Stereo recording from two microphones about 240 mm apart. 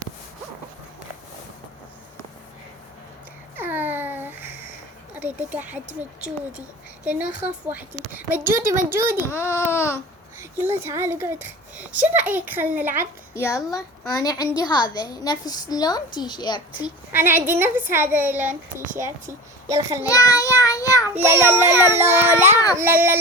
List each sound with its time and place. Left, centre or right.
3.5 s babbling: centre
5.1 s a child's voice: centre
7.1 s a child's voice: centre
9.3 s a woman's voice: centre
10.6 s a child's voice: centre
13.3 s a woman's voice: centre
17.1 s a child's voice: centre
20.1 s child singing: centre
21.2 s a child's voice: centre